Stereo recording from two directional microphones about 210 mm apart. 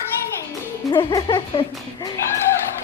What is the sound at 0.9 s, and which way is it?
Speech, 20° left (ahead or behind).